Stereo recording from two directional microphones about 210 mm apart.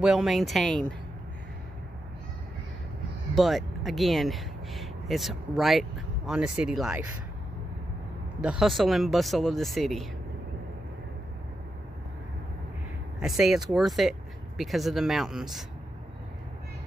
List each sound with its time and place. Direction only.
0.0 s speech: centre (ahead or behind)
3.3 s speech: centre (ahead or behind)
8.4 s speech: 5° right (ahead or behind)
13.2 s speech: centre (ahead or behind)